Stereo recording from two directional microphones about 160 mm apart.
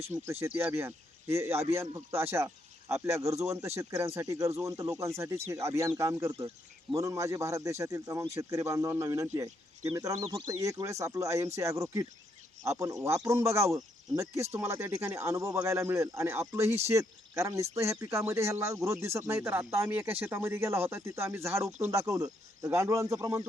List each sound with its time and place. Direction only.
0.0 s speech: 50° right (ahead or behind)
0.3 s speech: 15° right (ahead or behind)